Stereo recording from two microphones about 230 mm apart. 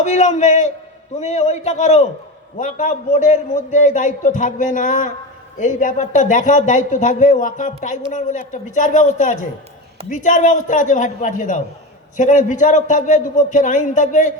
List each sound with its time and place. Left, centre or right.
0.0 s a man's voice: left